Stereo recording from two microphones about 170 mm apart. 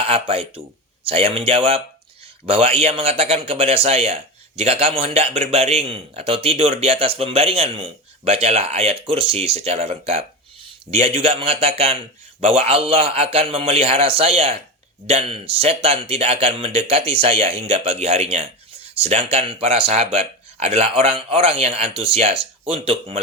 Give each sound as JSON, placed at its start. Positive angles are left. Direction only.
{"t": 0.0, "sound": "speech", "side_deg": -35}